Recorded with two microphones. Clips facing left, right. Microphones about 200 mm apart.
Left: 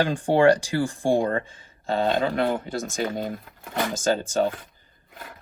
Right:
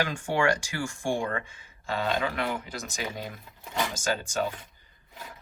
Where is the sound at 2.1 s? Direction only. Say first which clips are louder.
Left 6 dB; 50° left (ahead or behind).